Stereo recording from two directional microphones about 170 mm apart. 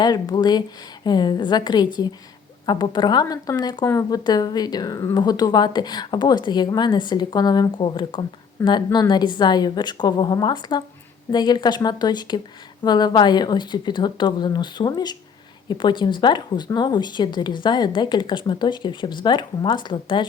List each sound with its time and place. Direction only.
0.0 s speech: 25° left (ahead or behind)